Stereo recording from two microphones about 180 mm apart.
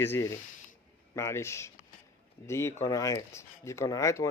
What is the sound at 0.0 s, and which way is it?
Speech, 15° left (ahead or behind).